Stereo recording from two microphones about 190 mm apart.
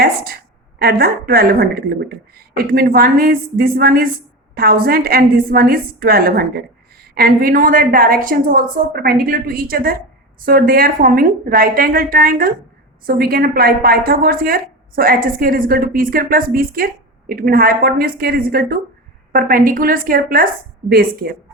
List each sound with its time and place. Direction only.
0.8 s a woman's voice: 55° right (ahead or behind)